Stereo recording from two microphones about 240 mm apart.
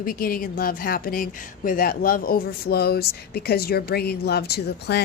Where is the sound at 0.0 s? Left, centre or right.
Left.